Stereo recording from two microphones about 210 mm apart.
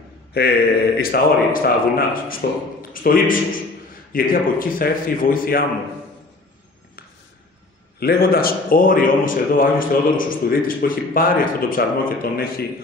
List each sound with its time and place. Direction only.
0.3 s a man's voice: 50° left (ahead or behind)
8.0 s a man's voice: 45° left (ahead or behind)